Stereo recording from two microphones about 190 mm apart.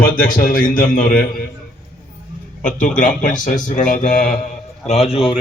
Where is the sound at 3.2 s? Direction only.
40° left (ahead or behind).